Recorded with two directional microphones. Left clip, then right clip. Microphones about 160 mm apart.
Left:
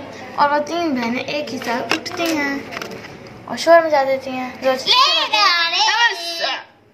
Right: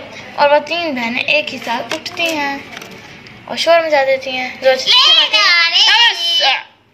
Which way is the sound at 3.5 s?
10° right (ahead or behind).